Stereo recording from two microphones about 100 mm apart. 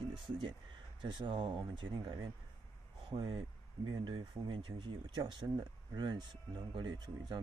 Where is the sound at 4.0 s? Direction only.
55° right (ahead or behind).